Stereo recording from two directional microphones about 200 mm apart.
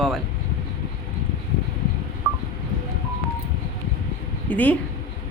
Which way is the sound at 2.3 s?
20° right (ahead or behind).